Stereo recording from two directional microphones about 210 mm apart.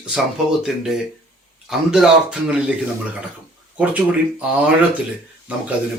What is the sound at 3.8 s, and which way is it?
Speech, 5° right (ahead or behind).